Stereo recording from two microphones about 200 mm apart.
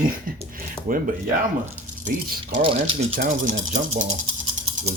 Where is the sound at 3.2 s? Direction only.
40° right (ahead or behind).